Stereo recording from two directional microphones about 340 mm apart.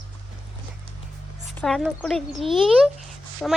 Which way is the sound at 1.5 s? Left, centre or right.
Centre.